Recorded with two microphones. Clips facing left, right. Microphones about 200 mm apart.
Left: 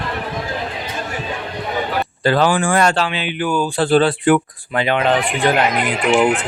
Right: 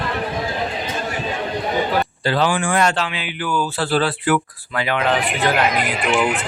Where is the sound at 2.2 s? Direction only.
50° left (ahead or behind).